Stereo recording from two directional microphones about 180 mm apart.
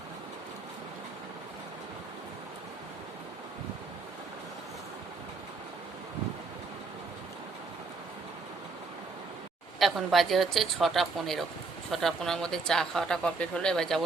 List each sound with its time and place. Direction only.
9.7 s speech: centre (ahead or behind)